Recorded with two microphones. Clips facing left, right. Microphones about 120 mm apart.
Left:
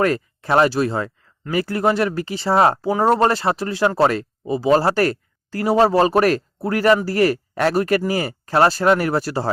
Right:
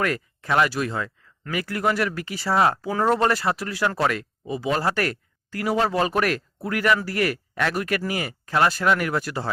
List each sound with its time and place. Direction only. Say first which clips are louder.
0.0 s speech: left 6 dB; 35° left (ahead or behind)